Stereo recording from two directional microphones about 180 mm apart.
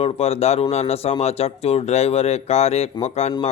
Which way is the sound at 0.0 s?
35° left (ahead or behind).